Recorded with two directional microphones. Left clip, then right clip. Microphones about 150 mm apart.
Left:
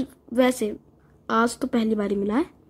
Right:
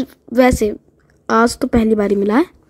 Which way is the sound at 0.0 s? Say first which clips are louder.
Right 8 dB; 40° right (ahead or behind).